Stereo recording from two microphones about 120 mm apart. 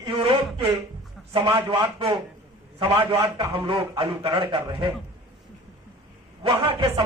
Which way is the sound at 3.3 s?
45° right (ahead or behind).